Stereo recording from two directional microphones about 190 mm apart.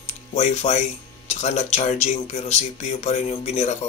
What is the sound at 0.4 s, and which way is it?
Speech, 35° left (ahead or behind).